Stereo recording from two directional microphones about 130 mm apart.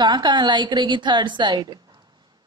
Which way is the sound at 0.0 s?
35° right (ahead or behind).